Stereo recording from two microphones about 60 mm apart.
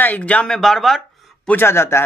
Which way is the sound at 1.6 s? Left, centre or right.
Left.